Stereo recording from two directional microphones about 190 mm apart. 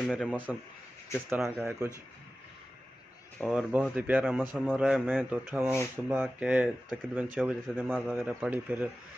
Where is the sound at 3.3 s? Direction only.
5° right (ahead or behind).